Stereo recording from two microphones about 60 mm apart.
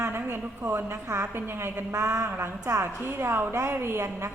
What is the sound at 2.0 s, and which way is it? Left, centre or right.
Mantra, right.